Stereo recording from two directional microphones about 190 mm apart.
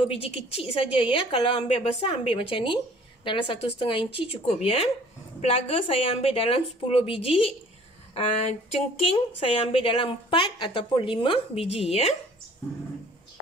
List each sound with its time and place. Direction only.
0.0 s a woman's voice: 30° left (ahead or behind)